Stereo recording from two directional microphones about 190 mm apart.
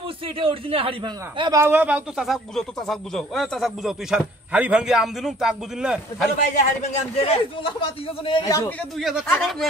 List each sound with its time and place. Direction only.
0.4 s a man's voice: 30° right (ahead or behind); by 6.2 s 5° right (ahead or behind)
6.5 s a man's voice: 35° left (ahead or behind)
8.3 s speech: 25° left (ahead or behind)
9.0 s a man's voice: centre (ahead or behind)